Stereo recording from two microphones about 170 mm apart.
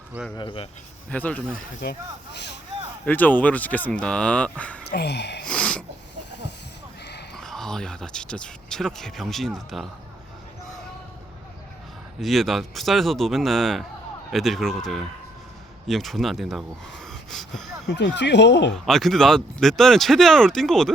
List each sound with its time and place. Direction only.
0.3 s speech: 30° left (ahead or behind)
1.1 s speech: 10° left (ahead or behind)
1.5 s speech: 70° left (ahead or behind); by 2.6 s 85° left
3.1 s speech: 10° left (ahead or behind)
4.9 s speech: 75° left (ahead or behind)
5.5 s a sound: 5° left (ahead or behind)
7.3 s speech: centre (ahead or behind)
12.2 s speech: centre (ahead or behind)
17.8 s speech: 90° left
18.7 s speech: centre (ahead or behind)